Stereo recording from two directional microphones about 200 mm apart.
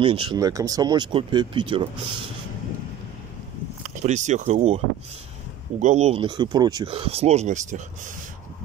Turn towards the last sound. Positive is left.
turn(degrees=-35)  # may be behind; listen again after turning